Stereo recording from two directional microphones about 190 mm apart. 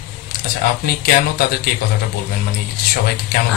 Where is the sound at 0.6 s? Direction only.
55° left (ahead or behind).